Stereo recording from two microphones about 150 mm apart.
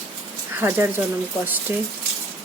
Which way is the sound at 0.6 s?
15° right (ahead or behind).